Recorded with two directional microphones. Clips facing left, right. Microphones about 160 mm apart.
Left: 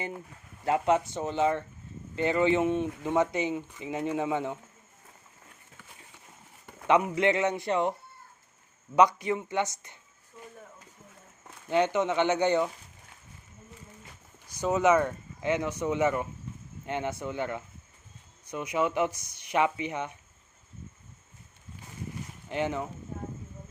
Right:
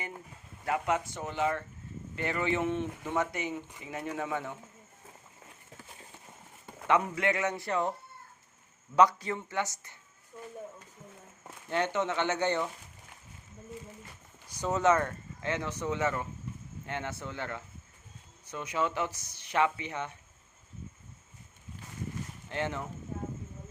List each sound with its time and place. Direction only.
0.6 s speech: 25° left (ahead or behind)
6.8 s speech: 20° left (ahead or behind)
9.0 s speech: 15° left (ahead or behind)
11.7 s speech: 15° left (ahead or behind)
14.6 s speech: 10° left (ahead or behind)
22.4 s speech: 15° left (ahead or behind)